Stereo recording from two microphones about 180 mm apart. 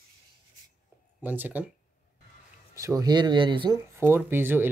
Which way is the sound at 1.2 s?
10° right (ahead or behind).